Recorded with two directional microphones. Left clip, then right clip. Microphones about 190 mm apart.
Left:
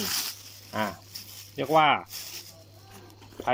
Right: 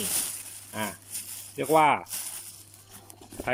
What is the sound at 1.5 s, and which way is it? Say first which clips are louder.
Speech: even; 15° right (ahead or behind).